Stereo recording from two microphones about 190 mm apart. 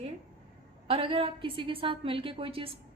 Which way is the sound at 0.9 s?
30° right (ahead or behind).